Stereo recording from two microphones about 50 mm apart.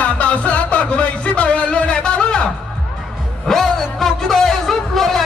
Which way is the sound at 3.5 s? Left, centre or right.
Centre.